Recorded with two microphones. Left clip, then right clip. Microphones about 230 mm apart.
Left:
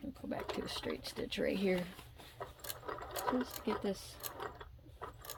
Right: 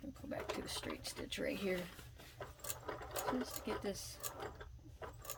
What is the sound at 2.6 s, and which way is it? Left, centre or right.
Sewing machine, centre.